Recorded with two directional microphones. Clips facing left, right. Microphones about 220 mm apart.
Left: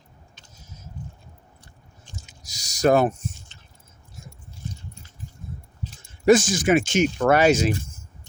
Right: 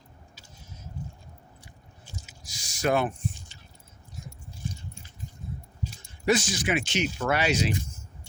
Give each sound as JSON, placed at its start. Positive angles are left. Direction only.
{"t": 0.5, "sound": "vehicle", "side_deg": 40}
{"t": 1.6, "sound": "biting", "side_deg": -10}
{"t": 2.4, "sound": "speech", "side_deg": 40}
{"t": 4.2, "sound": "biting", "side_deg": -15}
{"t": 5.8, "sound": "a sound", "side_deg": -10}
{"t": 6.2, "sound": "speech", "side_deg": 50}